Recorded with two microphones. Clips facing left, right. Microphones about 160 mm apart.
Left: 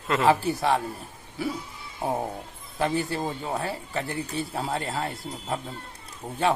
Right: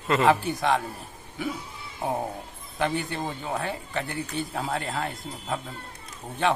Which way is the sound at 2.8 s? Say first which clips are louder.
Left 2 dB; 35° left (ahead or behind).